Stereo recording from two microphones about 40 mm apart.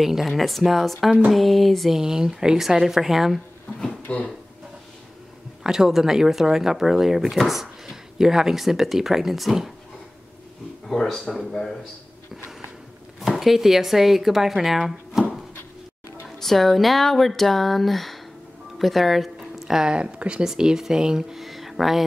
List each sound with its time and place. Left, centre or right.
0.0 s speech: centre
2.0 s speech: centre
4.1 s speech: left
5.6 s speech: centre
10.9 s a man's voice: centre
13.2 s speech: centre
16.3 s speech: centre; by 20.4 s right
20.4 s speech: centre
21.5 s a sound: centre